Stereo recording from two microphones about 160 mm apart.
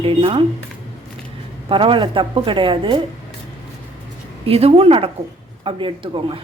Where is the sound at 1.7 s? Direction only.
30° right (ahead or behind).